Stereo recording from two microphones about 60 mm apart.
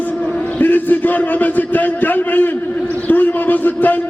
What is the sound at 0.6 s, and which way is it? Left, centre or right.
A man's voice, left.